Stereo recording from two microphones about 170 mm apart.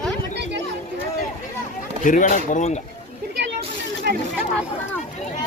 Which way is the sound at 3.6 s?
65° right (ahead or behind).